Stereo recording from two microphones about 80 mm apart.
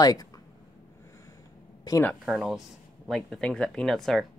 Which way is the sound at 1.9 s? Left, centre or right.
Left.